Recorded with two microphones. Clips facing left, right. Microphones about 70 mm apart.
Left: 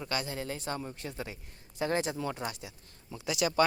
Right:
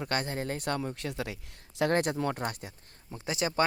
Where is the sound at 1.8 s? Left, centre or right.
Right.